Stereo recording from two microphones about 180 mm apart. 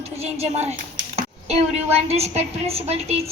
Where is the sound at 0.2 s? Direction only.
35° right (ahead or behind).